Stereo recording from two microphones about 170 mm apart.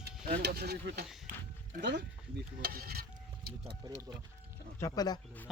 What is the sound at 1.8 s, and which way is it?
Speech, 80° right.